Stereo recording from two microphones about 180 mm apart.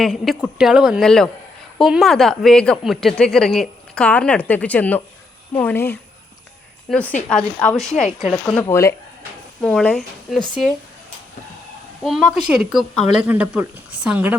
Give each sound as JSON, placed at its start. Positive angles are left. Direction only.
{"t": 0.0, "sound": "a woman's voice", "side_deg": 0}
{"t": 8.6, "sound": "speech", "side_deg": 15}
{"t": 9.6, "sound": "a woman's voice", "side_deg": 5}
{"t": 12.0, "sound": "a woman's voice", "side_deg": -5}